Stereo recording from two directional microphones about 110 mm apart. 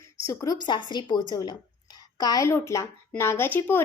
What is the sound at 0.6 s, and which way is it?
A woman's voice, 40° left (ahead or behind).